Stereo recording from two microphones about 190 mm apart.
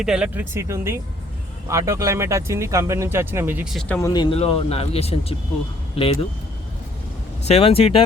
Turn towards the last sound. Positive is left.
turn(degrees=30)  # may be behind; listen again after turning